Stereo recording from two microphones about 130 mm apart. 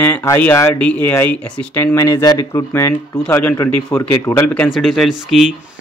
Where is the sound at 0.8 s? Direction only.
10° left (ahead or behind).